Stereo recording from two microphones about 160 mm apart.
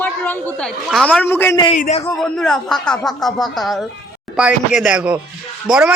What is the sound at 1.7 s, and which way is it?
Speech, 50° left (ahead or behind).